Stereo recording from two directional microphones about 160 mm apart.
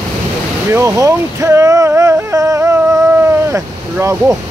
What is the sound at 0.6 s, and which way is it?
Speech, 20° right (ahead or behind).